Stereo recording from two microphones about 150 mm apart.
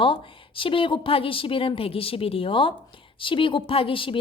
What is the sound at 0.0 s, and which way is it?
A woman's voice, 35° left (ahead or behind).